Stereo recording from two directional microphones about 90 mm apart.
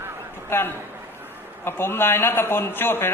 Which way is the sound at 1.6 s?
25° left (ahead or behind).